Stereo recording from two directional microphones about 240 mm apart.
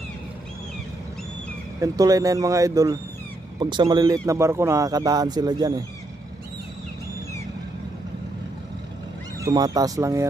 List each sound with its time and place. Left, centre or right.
1.8 s speech: centre
9.4 s speech: centre